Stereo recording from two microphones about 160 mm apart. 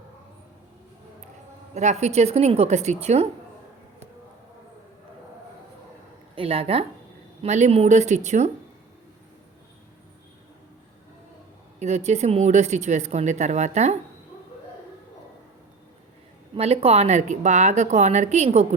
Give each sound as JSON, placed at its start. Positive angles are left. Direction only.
{"t": 1.7, "sound": "a woman's voice", "side_deg": -45}
{"t": 6.3, "sound": "a woman's voice", "side_deg": -35}
{"t": 11.8, "sound": "a woman's voice", "side_deg": -45}
{"t": 16.6, "sound": "a woman's voice", "side_deg": -40}